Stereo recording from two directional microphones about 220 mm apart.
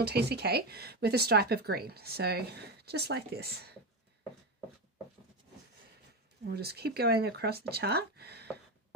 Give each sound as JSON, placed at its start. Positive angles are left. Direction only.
{"t": 0.0, "sound": "speech", "side_deg": -50}
{"t": 6.4, "sound": "speech", "side_deg": -45}